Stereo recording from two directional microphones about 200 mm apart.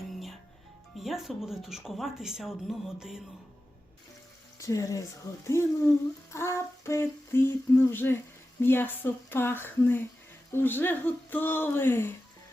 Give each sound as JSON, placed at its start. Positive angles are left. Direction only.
{"t": 0.1, "sound": "music", "side_deg": 0}
{"t": 0.9, "sound": "speech", "side_deg": 0}
{"t": 4.6, "sound": "speech", "side_deg": 15}
{"t": 6.3, "sound": "child singing", "side_deg": 15}
{"t": 8.6, "sound": "speech", "side_deg": 10}